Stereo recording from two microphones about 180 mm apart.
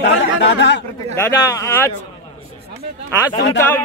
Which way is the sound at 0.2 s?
75° left (ahead or behind).